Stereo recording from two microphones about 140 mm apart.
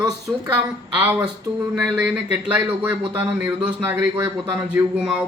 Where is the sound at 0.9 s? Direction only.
10° right (ahead or behind).